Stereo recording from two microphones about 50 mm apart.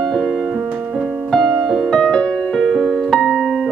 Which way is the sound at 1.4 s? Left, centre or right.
Centre.